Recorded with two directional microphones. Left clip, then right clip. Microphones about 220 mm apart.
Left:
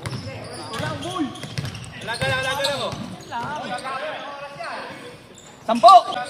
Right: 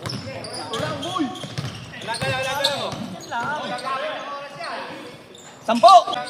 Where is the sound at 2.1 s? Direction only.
30° left (ahead or behind).